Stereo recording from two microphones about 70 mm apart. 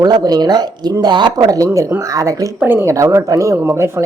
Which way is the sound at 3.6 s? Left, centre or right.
Right.